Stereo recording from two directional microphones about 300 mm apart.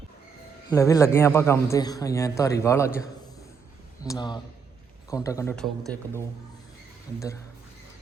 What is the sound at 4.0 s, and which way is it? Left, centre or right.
A man's voice, centre.